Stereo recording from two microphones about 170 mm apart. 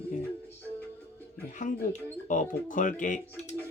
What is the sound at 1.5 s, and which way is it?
Speech, 50° left (ahead or behind).